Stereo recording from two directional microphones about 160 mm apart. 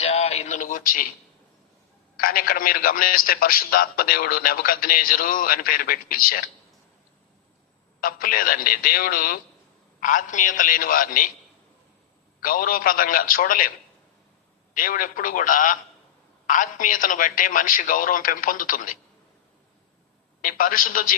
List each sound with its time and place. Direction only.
0.0 s a sound: 40° left (ahead or behind); by 1.0 s 55° left (ahead or behind)
2.1 s a man's voice: 65° left (ahead or behind)
8.0 s a man's voice: 60° left (ahead or behind)
12.4 s a man's voice: 60° left (ahead or behind)
20.4 s a man's voice: 60° left (ahead or behind)